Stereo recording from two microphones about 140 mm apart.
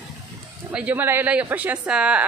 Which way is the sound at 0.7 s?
10° right (ahead or behind).